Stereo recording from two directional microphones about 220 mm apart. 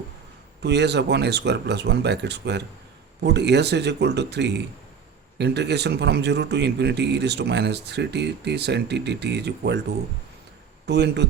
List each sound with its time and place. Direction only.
0.6 s speech: 50° right (ahead or behind)
10.8 s speech: 50° right (ahead or behind)